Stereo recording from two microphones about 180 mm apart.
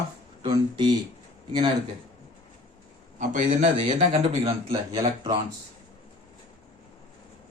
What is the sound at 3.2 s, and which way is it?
A man's voice, 45° right (ahead or behind).